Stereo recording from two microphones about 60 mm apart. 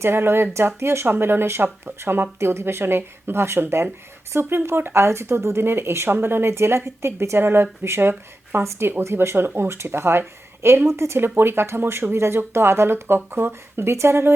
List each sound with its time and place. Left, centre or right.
0.0 s speech: right